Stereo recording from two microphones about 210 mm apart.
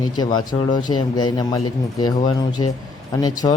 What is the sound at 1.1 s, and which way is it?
Speech, 20° left (ahead or behind).